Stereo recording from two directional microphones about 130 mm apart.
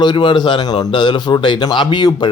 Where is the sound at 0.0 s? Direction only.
35° left (ahead or behind).